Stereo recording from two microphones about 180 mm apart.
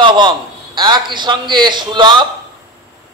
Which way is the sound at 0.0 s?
25° right (ahead or behind).